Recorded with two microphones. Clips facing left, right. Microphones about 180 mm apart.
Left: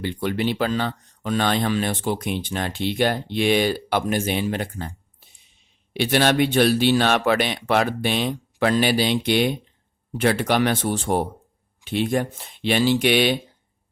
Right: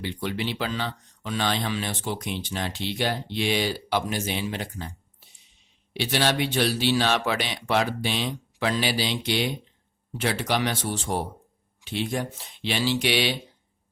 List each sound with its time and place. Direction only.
0.0 s speech: 50° left (ahead or behind)